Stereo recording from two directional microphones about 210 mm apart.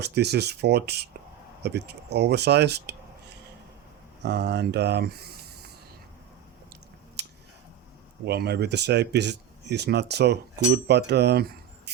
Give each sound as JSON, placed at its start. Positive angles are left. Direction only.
{"t": 0.0, "sound": "speech", "side_deg": -50}
{"t": 4.2, "sound": "speech", "side_deg": -55}
{"t": 7.2, "sound": "scissors", "side_deg": -50}
{"t": 8.2, "sound": "speech", "side_deg": -50}